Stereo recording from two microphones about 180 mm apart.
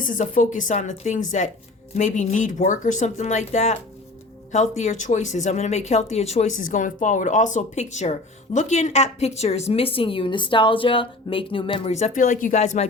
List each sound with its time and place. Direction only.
0.0 s speech: 50° left (ahead or behind); by 11.9 s 30° left (ahead or behind)
11.9 s speech: 45° left (ahead or behind)